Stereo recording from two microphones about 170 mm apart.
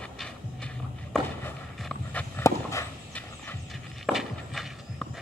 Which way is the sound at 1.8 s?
10° left (ahead or behind).